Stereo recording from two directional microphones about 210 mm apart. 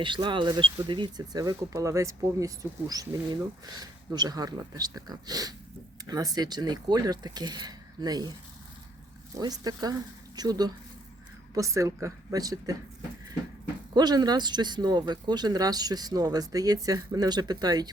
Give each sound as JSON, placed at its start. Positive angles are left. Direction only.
{"t": 0.0, "sound": "speech", "side_deg": -20}
{"t": 9.4, "sound": "speech", "side_deg": -20}
{"t": 13.9, "sound": "speech", "side_deg": -20}